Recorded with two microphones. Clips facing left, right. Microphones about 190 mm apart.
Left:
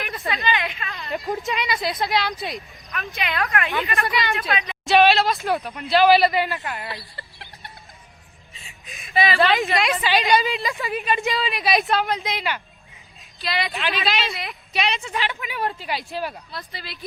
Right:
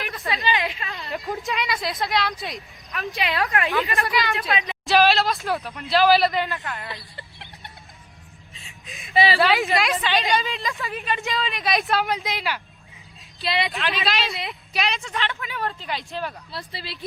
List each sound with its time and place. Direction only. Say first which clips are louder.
0.4 s a sound: right 2 dB; 35° right (ahead or behind)
1.1 s speech: left 2 dB; centre (ahead or behind)
2.9 s speech: right 2 dB; 35° right (ahead or behind)
4.0 s speech: even; centre (ahead or behind)
4.5 s a woman's voice: right 1 dB; 30° right (ahead or behind)
4.9 s speech: left 2 dB; centre (ahead or behind); by 6.8 s 15° left (ahead or behind)
7.2 s a sound: even; 20° right (ahead or behind)
8.5 s a sound: left 2 dB; centre (ahead or behind)
9.1 s speech: right 1 dB; 30° right (ahead or behind)
9.4 s speech: left 1 dB; centre (ahead or behind)
10.1 s a woman's voice: left 3 dB; 15° left (ahead or behind); by 12.6 s centre (ahead or behind)
13.4 s speech: right 1 dB; 25° right (ahead or behind)
13.7 s a woman's voice: left 1 dB; centre (ahead or behind)
16.5 s speech: right 1 dB; 30° right (ahead or behind)